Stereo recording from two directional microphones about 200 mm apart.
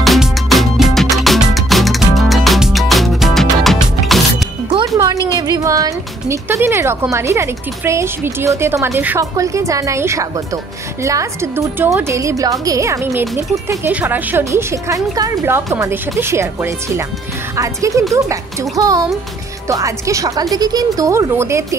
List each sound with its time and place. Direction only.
0.0 s music: centre (ahead or behind)
4.6 s music: 20° right (ahead or behind)
5.5 s a woman's voice: 15° right (ahead or behind)